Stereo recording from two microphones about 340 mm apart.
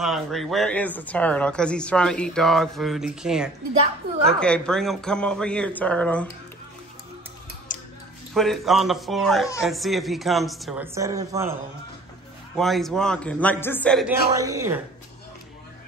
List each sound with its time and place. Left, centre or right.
0.0 s speech: centre
7.7 s clicking: left
8.4 s speech: centre
12.5 s speech: centre
14.3 s speech: centre